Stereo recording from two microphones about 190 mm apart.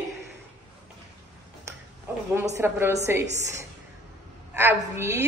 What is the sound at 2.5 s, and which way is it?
Speech, 10° right (ahead or behind).